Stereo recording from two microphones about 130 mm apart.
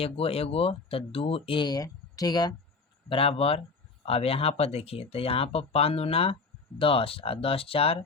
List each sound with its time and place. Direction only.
0.0 s speech: 50° left (ahead or behind); by 2.5 s 30° left (ahead or behind)
3.1 s speech: 45° left (ahead or behind)